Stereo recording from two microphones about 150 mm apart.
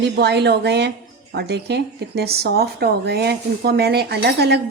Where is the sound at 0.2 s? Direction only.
90° right.